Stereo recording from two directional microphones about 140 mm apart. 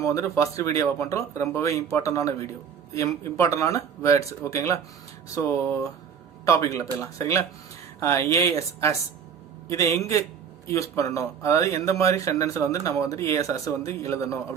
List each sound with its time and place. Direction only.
0.0 s speech: 25° left (ahead or behind)